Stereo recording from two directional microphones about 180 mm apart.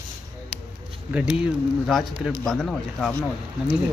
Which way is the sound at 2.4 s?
Centre (ahead or behind).